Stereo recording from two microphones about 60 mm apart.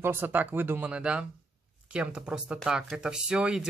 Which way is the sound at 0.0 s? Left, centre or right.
Right.